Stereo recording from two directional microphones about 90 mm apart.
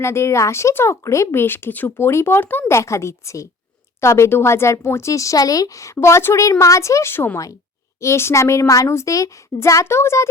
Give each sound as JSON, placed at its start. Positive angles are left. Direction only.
{"t": 0.0, "sound": "speech", "side_deg": 30}
{"t": 2.7, "sound": "speech", "side_deg": 30}